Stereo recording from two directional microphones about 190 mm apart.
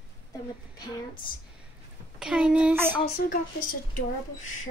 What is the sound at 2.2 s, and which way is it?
Speech, 5° right (ahead or behind).